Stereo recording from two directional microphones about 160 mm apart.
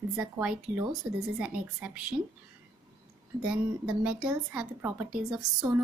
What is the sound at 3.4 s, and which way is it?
A woman's voice, 5° right (ahead or behind).